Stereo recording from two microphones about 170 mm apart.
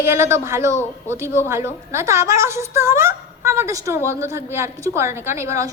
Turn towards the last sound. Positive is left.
turn(degrees=-15)  # may be behind; listen again after turning